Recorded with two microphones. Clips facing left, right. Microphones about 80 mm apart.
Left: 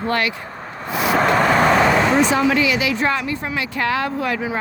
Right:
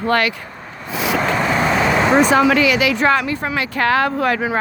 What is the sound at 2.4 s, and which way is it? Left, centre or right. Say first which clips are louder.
Speech: right 3 dB; right.